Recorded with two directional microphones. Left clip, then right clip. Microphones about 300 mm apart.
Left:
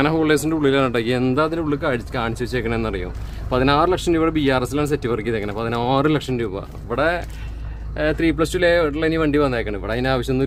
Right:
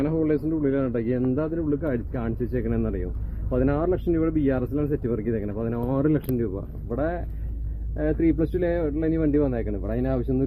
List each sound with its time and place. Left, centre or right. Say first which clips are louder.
0.0 s speech: left 6 dB; centre